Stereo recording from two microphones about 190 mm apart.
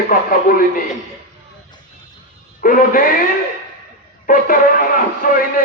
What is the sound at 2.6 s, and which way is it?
Speech, 45° left (ahead or behind).